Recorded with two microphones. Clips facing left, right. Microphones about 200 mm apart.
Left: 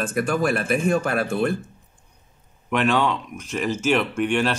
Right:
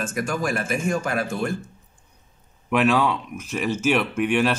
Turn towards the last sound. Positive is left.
turn(degrees=-5)  # may be behind; listen again after turning